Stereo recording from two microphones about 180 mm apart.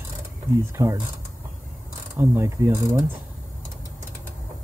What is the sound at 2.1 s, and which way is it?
Speech, 15° right (ahead or behind).